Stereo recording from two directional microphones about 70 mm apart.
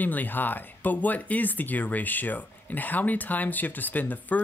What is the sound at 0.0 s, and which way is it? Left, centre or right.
Speech, left.